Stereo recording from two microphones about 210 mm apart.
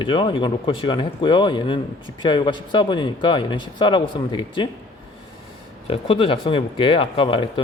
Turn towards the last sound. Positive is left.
turn(degrees=25)  # may be behind; listen again after turning